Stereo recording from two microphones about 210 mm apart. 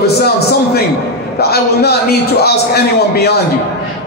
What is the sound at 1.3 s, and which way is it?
A man's voice, 50° left (ahead or behind).